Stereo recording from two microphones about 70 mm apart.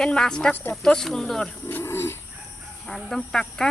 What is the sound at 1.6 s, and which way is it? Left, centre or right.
Speech, left.